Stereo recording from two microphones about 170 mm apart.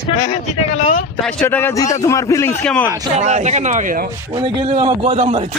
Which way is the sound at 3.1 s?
45° right (ahead or behind).